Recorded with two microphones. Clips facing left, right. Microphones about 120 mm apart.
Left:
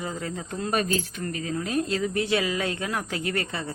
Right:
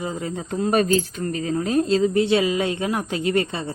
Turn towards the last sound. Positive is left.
turn(degrees=-25)  # may be behind; listen again after turning